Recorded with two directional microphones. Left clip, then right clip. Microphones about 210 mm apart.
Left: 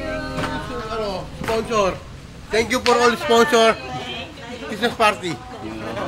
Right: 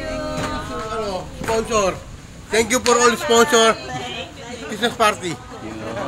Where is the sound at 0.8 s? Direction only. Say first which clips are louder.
Even; 10° right (ahead or behind).